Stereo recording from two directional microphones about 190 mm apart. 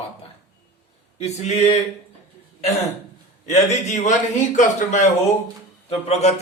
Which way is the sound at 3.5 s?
35° left (ahead or behind).